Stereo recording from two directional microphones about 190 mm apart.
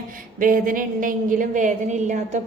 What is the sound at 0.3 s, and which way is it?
A woman's voice, 45° right (ahead or behind).